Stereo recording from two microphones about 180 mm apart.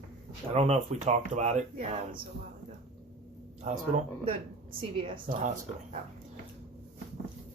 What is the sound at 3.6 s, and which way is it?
Speech, 45° right (ahead or behind).